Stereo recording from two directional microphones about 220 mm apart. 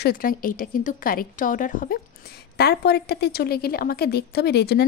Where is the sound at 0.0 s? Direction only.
40° left (ahead or behind).